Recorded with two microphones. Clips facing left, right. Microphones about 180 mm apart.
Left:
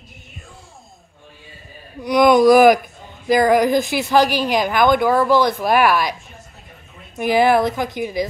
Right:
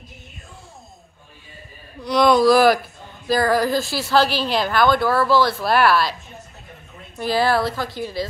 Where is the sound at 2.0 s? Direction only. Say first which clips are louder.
Left 3 dB; 15° left (ahead or behind).